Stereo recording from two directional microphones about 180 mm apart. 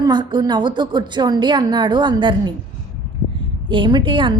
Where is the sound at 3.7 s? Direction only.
25° right (ahead or behind).